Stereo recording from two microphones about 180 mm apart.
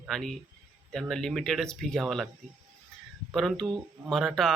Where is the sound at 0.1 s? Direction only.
5° left (ahead or behind).